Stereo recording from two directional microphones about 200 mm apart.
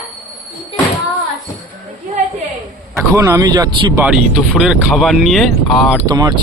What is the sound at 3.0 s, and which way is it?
Speech, 15° right (ahead or behind).